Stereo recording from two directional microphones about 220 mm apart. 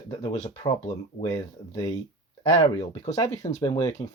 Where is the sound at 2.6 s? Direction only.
20° left (ahead or behind).